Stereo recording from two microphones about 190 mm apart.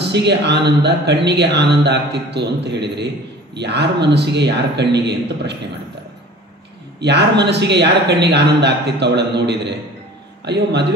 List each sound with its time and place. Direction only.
0.0 s speech: 65° right (ahead or behind)
7.0 s speech: 65° right (ahead or behind)